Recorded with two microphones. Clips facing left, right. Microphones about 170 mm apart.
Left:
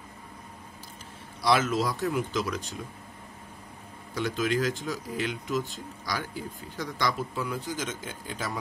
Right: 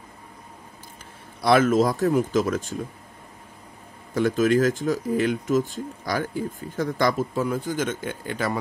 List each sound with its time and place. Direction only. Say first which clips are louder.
1.4 s speech: right 7 dB; 50° right (ahead or behind)
4.1 s speech: right 8 dB; 50° right (ahead or behind)